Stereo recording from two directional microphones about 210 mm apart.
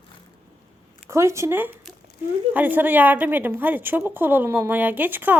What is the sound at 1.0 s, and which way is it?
Speech, 15° right (ahead or behind).